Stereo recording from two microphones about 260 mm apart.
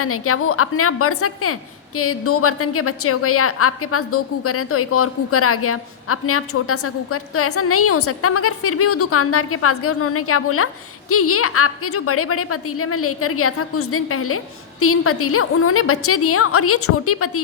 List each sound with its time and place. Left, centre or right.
0.0 s a woman's voice: left